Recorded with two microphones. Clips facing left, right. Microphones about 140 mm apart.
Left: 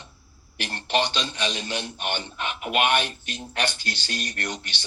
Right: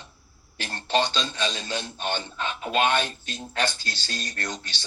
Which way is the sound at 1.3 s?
20° left (ahead or behind).